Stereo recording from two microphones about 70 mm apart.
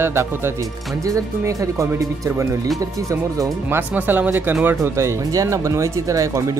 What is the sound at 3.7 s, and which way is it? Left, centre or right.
Speech, right.